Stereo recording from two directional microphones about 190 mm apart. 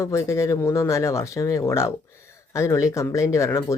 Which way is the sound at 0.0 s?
15° left (ahead or behind).